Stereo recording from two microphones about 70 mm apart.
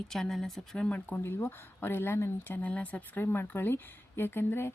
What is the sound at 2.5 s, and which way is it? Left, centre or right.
Speech, left.